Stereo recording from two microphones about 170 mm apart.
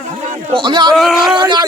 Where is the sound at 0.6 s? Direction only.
25° right (ahead or behind).